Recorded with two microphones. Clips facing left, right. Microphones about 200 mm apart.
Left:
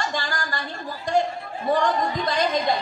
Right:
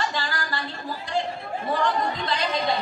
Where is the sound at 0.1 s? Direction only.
45° left (ahead or behind).